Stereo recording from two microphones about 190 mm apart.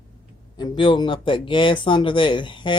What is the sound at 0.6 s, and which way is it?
Speech, 25° left (ahead or behind).